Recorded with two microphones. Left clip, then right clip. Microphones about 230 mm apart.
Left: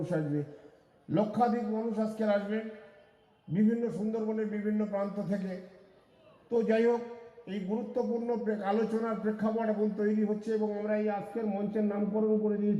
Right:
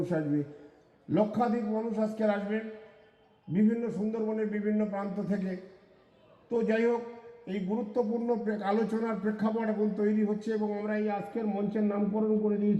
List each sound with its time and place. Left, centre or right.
0.1 s a man's voice: right
6.5 s a man's voice: right